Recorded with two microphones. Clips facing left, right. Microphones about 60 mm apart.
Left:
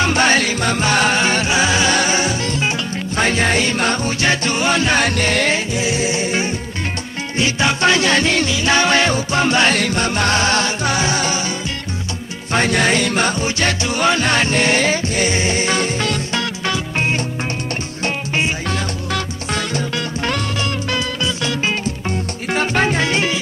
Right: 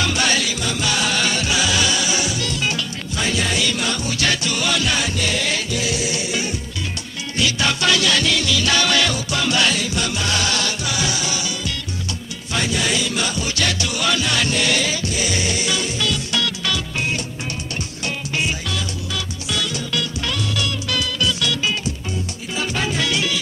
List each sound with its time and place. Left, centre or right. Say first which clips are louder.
0.0 s music: left 5 dB; left
4.2 s music: left 3 dB; left
5.0 s music: left 6 dB; left
5.5 s music: left 4 dB; left
12.5 s music: left 6 dB; left
22.5 s music: left 7 dB; left